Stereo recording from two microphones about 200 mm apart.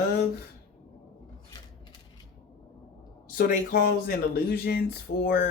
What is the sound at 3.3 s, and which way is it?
Speech, 45° left (ahead or behind).